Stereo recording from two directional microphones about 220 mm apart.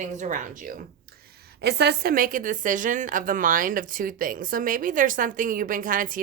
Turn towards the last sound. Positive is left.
turn(degrees=-40)  # may be behind; listen again after turning